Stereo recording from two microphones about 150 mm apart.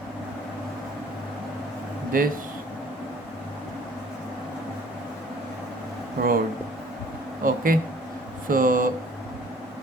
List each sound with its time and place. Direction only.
2.1 s speech: 65° right (ahead or behind)
6.2 s speech: 90° right
7.4 s speech: 70° right (ahead or behind)